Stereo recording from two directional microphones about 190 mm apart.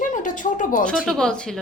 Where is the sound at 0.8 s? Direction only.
5° left (ahead or behind).